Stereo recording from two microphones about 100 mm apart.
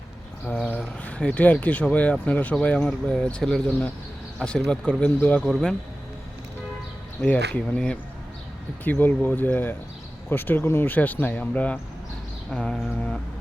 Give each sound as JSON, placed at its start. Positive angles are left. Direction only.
{"t": 0.4, "sound": "a sound", "side_deg": 15}
{"t": 1.0, "sound": "speech", "side_deg": 15}
{"t": 5.5, "sound": "speech", "side_deg": 0}
{"t": 7.3, "sound": "speech", "side_deg": 15}
{"t": 8.8, "sound": "speech", "side_deg": 20}